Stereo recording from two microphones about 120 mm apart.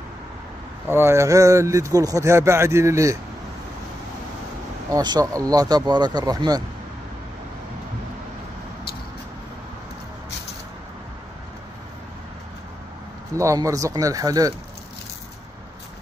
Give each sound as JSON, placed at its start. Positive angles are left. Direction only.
{"t": 0.8, "sound": "speech", "side_deg": -20}
{"t": 4.9, "sound": "speech", "side_deg": -35}
{"t": 13.4, "sound": "speech", "side_deg": -25}